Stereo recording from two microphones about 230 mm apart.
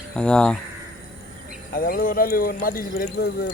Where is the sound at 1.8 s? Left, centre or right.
Left.